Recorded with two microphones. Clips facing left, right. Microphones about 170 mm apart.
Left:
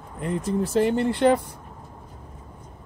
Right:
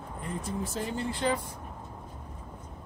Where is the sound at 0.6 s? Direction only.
70° left (ahead or behind).